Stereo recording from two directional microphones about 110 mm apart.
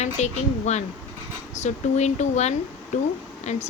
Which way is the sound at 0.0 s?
90° left.